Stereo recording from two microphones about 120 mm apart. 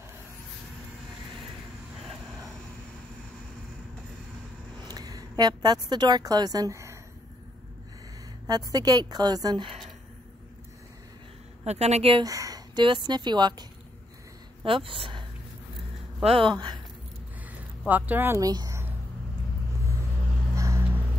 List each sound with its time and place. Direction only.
4.8 s a sound: 35° right (ahead or behind)
5.4 s a woman's voice: 35° right (ahead or behind)
8.5 s a woman's voice: 30° right (ahead or behind)
11.6 s a woman's voice: 65° right (ahead or behind)
12.2 s a woman's voice: 30° right (ahead or behind)
14.6 s speech: 50° right (ahead or behind)
16.3 s speech: 50° right (ahead or behind)
16.5 s a woman's voice: 40° right (ahead or behind)
17.5 s speech: 15° right (ahead or behind)
18.5 s speech: 35° right (ahead or behind)
20.5 s vehicle: 25° right (ahead or behind)